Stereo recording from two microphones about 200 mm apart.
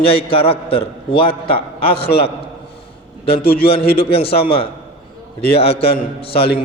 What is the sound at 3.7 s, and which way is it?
Speech, 30° left (ahead or behind).